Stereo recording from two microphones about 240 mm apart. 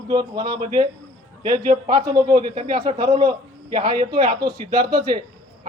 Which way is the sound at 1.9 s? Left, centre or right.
Centre.